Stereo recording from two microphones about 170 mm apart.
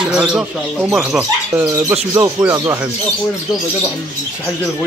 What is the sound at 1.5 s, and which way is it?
Speech, 15° right (ahead or behind).